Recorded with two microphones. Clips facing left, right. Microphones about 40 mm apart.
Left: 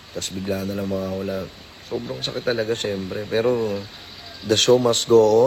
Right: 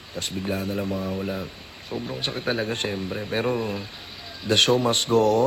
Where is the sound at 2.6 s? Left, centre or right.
Right.